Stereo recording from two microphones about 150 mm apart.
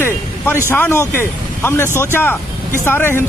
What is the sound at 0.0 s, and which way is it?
Speech, 15° left (ahead or behind).